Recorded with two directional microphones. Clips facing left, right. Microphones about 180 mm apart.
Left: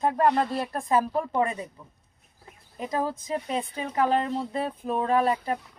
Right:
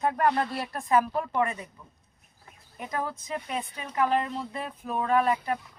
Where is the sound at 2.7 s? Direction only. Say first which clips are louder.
Left 4 dB; 25° left (ahead or behind).